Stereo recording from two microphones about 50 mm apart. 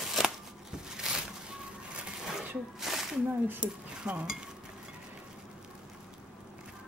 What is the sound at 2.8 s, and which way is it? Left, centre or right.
Snake, centre.